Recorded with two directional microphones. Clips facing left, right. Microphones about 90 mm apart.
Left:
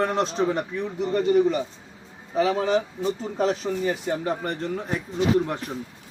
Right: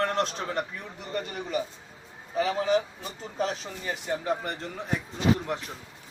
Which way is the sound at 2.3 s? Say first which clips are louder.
Left 3 dB; centre (ahead or behind).